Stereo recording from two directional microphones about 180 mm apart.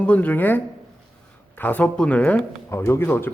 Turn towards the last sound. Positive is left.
turn(degrees=10)  # may be behind; listen again after turning